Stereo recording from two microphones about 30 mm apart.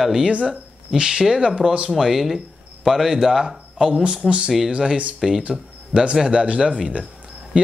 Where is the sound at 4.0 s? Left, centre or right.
Right.